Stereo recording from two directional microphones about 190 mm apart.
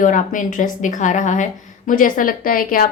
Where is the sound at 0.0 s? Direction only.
45° left (ahead or behind).